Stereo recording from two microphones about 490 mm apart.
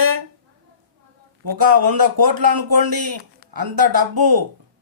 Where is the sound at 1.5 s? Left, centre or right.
Right.